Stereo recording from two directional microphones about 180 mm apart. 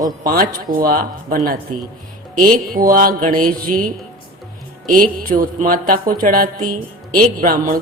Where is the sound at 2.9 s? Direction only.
50° right (ahead or behind).